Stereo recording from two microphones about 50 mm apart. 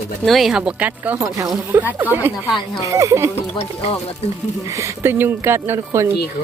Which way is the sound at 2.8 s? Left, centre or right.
Right.